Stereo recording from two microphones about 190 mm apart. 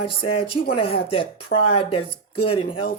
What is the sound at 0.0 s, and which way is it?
Speech, 30° left (ahead or behind).